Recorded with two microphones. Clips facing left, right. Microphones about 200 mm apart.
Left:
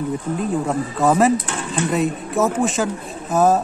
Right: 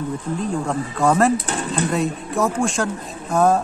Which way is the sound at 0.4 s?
5° left (ahead or behind).